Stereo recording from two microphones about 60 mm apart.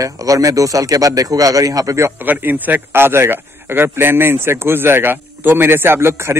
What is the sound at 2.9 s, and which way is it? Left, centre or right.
A man's voice, right.